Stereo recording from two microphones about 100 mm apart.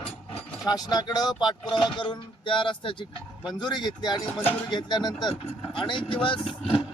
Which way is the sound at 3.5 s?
45° left (ahead or behind).